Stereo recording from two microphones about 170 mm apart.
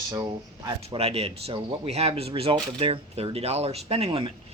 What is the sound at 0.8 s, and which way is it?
Speech, 35° right (ahead or behind).